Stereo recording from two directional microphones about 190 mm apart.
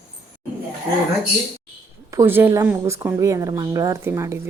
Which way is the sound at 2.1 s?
15° right (ahead or behind).